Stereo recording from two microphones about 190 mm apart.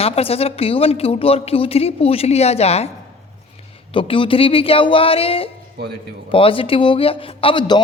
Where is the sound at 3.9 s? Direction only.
25° left (ahead or behind).